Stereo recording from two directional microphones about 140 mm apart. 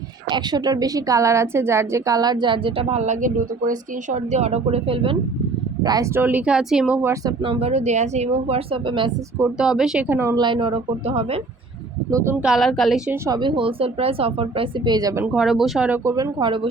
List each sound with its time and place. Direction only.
0.3 s a woman's voice: 30° right (ahead or behind)
5.8 s speech: 30° right (ahead or behind)
6.1 s a woman's voice: 10° right (ahead or behind)
7.4 s speech: 45° right (ahead or behind)
9.6 s speech: 5° right (ahead or behind)
10.1 s a woman's voice: 20° right (ahead or behind)
10.3 s a woman's voice: 35° right (ahead or behind)
12.1 s a woman's voice: 15° right (ahead or behind)
12.5 s speech: centre (ahead or behind)
13.2 s a woman's voice: 30° right (ahead or behind)
15.2 s speech: 5° right (ahead or behind)
16.1 s a woman's voice: 35° right (ahead or behind)